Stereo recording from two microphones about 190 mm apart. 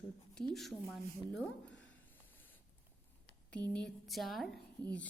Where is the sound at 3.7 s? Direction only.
Centre (ahead or behind).